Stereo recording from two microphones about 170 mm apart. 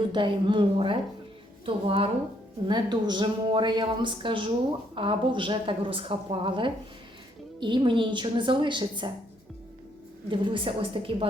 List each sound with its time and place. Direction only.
0.1 s a woman's voice: 30° right (ahead or behind)
10.2 s a woman's voice: 30° right (ahead or behind)